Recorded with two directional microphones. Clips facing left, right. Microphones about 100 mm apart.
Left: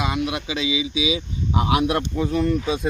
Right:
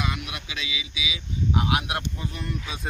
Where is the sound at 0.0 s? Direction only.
25° left (ahead or behind).